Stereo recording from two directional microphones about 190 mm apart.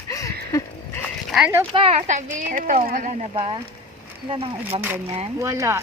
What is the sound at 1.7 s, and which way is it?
Speech, 30° right (ahead or behind).